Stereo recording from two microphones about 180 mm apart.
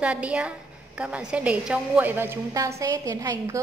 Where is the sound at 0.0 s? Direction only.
5° right (ahead or behind).